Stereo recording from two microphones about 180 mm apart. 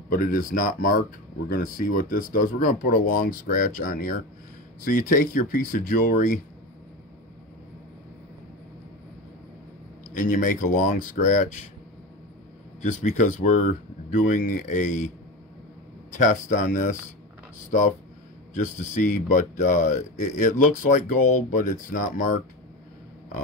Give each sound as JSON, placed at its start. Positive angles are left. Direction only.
{"t": 0.1, "sound": "speech", "side_deg": 50}
{"t": 10.1, "sound": "speech", "side_deg": 45}
{"t": 13.1, "sound": "speech", "side_deg": 45}
{"t": 16.1, "sound": "speech", "side_deg": 45}